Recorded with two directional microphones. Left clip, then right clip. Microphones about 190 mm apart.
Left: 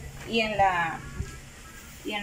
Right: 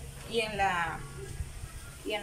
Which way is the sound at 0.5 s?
20° left (ahead or behind).